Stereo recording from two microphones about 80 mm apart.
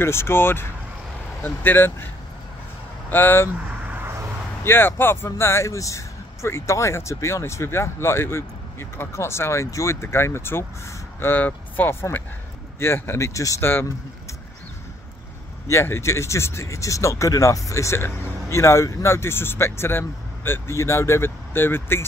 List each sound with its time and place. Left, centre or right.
0.0 s speech: left
3.1 s speech: left
4.6 s speech: left
13.6 s speech: left
15.7 s speech: left